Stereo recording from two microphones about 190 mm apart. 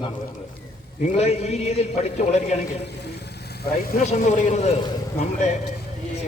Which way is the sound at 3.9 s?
40° left (ahead or behind).